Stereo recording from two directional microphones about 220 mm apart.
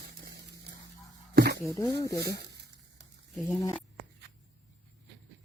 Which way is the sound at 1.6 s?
15° left (ahead or behind).